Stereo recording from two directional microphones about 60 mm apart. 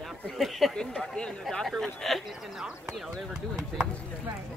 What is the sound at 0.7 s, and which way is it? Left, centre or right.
Speech, centre.